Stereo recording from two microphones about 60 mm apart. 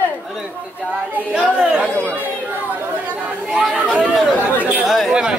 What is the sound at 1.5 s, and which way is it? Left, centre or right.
Speech, right.